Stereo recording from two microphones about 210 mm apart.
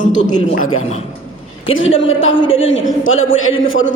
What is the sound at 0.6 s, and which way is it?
Speech, 75° left (ahead or behind).